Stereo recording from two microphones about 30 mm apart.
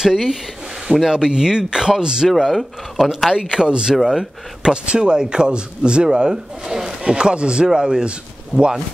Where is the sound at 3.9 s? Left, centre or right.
Centre.